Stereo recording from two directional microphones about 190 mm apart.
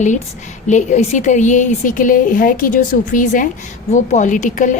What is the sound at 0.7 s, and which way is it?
A woman's voice, 40° left (ahead or behind).